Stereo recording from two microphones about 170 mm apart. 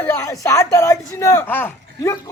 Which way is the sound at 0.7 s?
20° left (ahead or behind).